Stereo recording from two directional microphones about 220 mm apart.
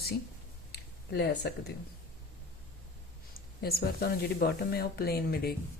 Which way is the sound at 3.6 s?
45° left (ahead or behind).